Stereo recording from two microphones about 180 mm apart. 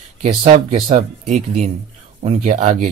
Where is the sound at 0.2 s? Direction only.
40° right (ahead or behind).